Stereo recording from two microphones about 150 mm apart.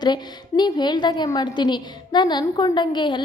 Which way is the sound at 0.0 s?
30° left (ahead or behind).